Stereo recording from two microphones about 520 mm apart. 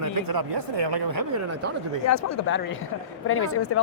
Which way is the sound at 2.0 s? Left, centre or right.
Left.